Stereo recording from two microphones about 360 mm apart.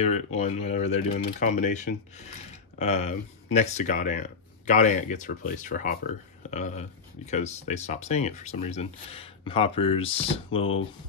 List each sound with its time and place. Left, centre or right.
0.0 s speech: centre